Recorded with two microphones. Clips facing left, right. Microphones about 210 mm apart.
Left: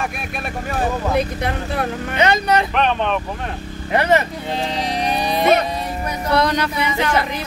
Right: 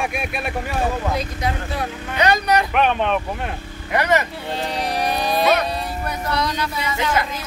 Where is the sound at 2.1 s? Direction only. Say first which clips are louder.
Left 1 dB; 25° left (ahead or behind).